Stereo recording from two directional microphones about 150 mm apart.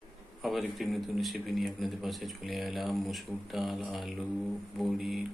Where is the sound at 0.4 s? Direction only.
Centre (ahead or behind).